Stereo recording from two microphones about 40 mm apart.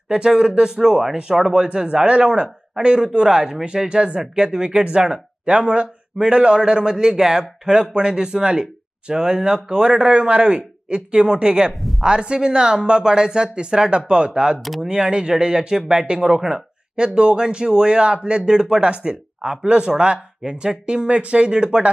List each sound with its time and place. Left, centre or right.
0.1 s speech: centre
14.6 s speech: centre
14.9 s speech: right